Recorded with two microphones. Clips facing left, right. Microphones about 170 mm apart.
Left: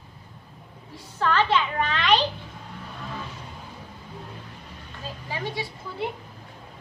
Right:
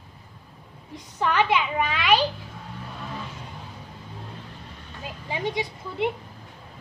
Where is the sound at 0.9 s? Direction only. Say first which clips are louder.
Even; 15° right (ahead or behind).